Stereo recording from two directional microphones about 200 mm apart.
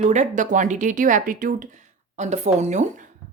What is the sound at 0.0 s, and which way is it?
Speech, 35° right (ahead or behind).